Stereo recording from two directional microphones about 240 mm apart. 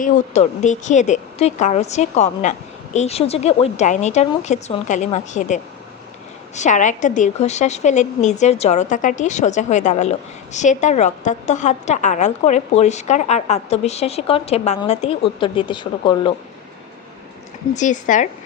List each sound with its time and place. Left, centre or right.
0.0 s a woman's voice: left
6.6 s a woman's voice: left
17.7 s speech: left